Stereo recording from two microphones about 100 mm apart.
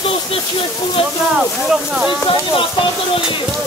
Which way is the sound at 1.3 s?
5° right (ahead or behind).